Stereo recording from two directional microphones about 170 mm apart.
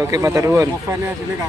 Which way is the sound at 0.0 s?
20° right (ahead or behind).